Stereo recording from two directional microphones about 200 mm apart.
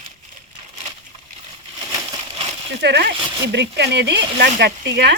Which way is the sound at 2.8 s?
60° right (ahead or behind).